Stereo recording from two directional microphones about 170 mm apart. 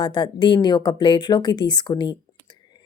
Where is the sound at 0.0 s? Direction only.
25° left (ahead or behind).